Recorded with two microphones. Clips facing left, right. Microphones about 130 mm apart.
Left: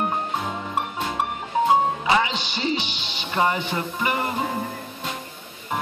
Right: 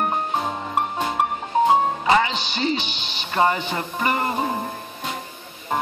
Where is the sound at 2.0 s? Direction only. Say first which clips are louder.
Right 2 dB; 45° right (ahead or behind).